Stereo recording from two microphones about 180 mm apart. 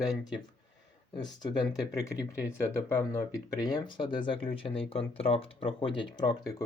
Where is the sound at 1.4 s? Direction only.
20° left (ahead or behind).